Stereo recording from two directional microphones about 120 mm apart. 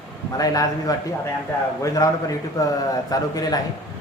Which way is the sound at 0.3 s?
30° left (ahead or behind).